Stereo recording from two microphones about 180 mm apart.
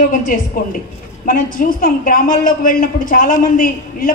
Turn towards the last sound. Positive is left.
turn(degrees=50)  # may be behind; listen again after turning